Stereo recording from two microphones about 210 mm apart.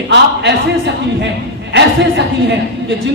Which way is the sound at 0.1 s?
55° right (ahead or behind).